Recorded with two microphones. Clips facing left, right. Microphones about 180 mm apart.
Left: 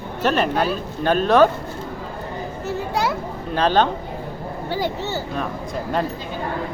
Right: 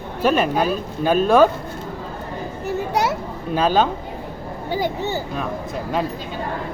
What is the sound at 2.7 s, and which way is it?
Children playing, 20° right (ahead or behind).